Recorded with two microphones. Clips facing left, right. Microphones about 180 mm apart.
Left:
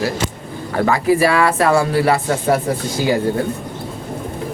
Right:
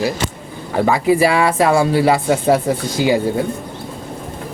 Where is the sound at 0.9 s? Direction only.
15° right (ahead or behind).